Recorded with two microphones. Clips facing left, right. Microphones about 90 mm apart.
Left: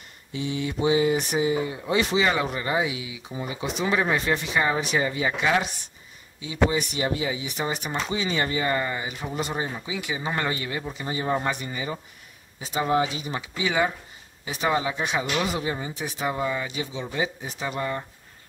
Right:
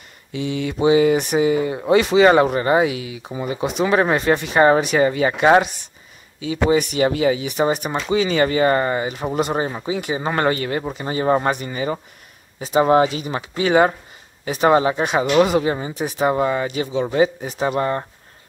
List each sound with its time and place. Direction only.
0.3 s speech: 75° right (ahead or behind); by 5.7 s 55° right (ahead or behind)
6.4 s speech: 70° right (ahead or behind); by 9.3 s 50° right (ahead or behind)
9.3 s speech: 60° right (ahead or behind); by 10.3 s 45° right (ahead or behind)
10.3 s speech: 60° right (ahead or behind)
15.3 s speech: 65° right (ahead or behind)